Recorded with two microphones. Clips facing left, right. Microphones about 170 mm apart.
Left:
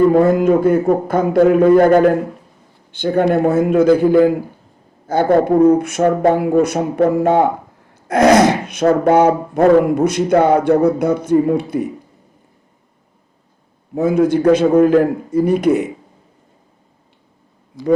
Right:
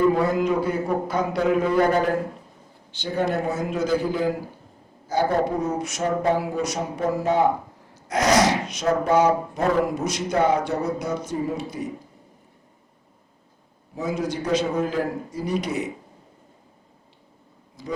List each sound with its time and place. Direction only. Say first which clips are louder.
0.1 s a man's voice: left 9 dB; 50° left (ahead or behind)
13.9 s speech: left 13 dB; 55° left (ahead or behind)
17.8 s speech: left 15 dB; 70° left (ahead or behind)